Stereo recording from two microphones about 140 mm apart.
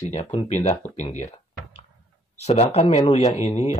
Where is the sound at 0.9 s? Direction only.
55° left (ahead or behind).